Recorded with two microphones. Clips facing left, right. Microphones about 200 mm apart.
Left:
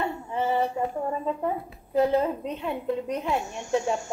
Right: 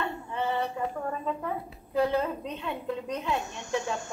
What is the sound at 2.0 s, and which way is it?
A woman's voice, 20° left (ahead or behind).